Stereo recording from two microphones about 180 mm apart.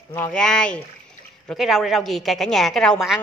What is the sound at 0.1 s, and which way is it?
A woman's voice, 10° left (ahead or behind).